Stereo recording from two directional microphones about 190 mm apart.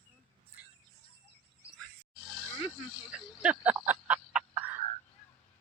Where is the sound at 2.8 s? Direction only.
5° right (ahead or behind).